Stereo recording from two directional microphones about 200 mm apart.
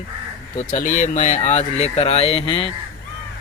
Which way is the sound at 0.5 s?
40° left (ahead or behind).